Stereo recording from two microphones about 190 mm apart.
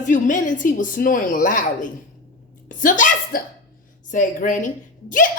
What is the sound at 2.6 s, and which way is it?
Hiccup, 45° left (ahead or behind).